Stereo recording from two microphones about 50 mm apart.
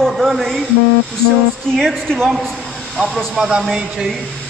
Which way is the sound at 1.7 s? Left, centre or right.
Centre.